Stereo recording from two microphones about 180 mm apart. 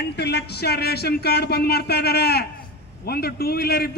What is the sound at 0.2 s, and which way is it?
A man's voice, 65° left (ahead or behind).